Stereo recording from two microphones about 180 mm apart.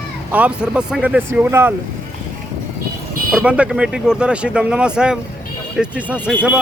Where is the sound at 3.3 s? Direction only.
5° right (ahead or behind).